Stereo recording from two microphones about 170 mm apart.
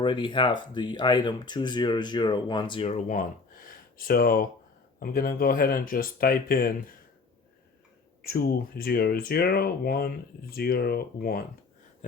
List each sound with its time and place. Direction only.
0.0 s speech: 30° left (ahead or behind); by 6.9 s 60° left (ahead or behind)
8.2 s speech: 60° left (ahead or behind)